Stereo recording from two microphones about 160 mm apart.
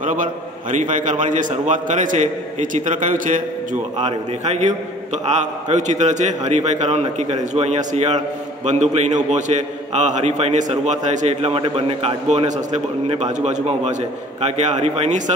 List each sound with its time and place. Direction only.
0.0 s a man's voice: 55° right (ahead or behind)
4.5 s a man's voice: 45° right (ahead or behind)